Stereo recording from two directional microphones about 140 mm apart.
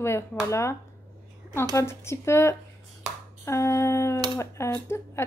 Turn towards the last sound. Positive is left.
turn(degrees=20)  # may be behind; listen again after turning